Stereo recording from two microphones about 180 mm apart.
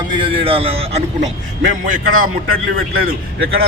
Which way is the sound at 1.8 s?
50° right (ahead or behind).